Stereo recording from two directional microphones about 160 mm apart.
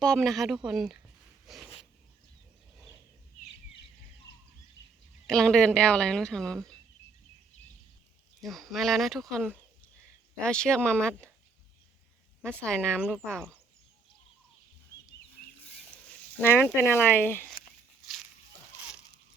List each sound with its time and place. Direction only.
0.0 s speech: 5° left (ahead or behind)
1.5 s a sound: centre (ahead or behind)
5.2 s speech: 5° left (ahead or behind)
8.4 s speech: centre (ahead or behind)
12.4 s speech: 5° left (ahead or behind)
16.0 s speech: 10° left (ahead or behind)